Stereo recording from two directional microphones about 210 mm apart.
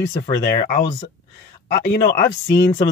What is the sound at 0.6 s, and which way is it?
Speech, 40° left (ahead or behind).